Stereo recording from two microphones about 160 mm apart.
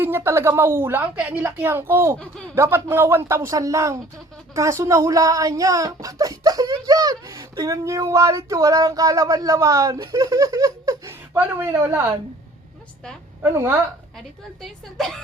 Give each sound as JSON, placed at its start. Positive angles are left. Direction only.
{"t": 0.0, "sound": "a woman's voice", "side_deg": -15}
{"t": 13.4, "sound": "a woman's voice", "side_deg": -15}
{"t": 14.6, "sound": "a woman's voice", "side_deg": 0}